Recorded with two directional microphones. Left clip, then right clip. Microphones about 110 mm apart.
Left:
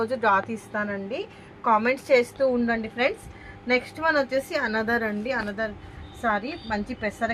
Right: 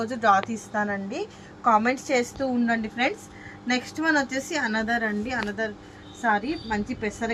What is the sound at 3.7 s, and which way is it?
Speech, 40° left (ahead or behind).